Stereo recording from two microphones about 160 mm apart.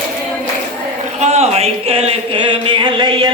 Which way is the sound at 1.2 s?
40° right (ahead or behind).